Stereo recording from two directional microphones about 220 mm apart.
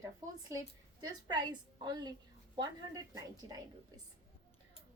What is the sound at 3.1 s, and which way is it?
Speech, 15° right (ahead or behind).